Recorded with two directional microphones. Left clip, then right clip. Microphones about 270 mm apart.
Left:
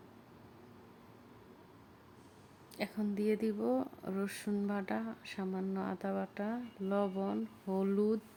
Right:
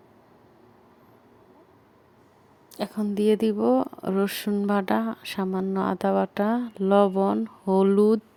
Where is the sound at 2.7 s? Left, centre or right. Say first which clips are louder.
Right 10 dB; right.